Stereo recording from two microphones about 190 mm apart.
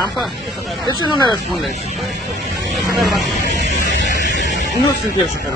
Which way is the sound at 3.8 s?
65° left (ahead or behind).